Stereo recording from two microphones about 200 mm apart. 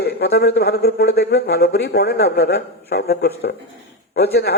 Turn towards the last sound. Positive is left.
turn(degrees=50)  # may be behind; listen again after turning